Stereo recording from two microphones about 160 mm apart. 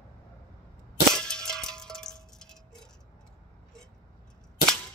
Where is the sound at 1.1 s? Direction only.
5° left (ahead or behind).